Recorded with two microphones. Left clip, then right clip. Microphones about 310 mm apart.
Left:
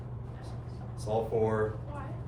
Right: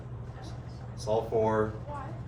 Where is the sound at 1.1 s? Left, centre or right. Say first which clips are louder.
Right 2 dB; centre.